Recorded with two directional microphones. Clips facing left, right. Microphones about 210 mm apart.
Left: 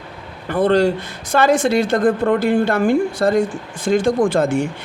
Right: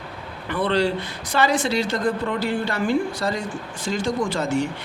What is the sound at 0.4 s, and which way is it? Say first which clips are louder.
Speech: left 6 dB; 45° left (ahead or behind).